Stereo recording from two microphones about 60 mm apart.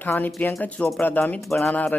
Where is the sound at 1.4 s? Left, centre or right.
Centre.